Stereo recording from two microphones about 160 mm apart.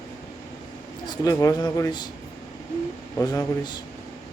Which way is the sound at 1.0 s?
25° left (ahead or behind).